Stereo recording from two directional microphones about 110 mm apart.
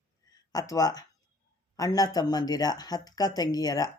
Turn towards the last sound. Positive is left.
turn(degrees=35)  # may be behind; listen again after turning